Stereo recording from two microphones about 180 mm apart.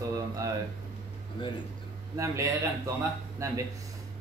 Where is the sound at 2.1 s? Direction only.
15° right (ahead or behind).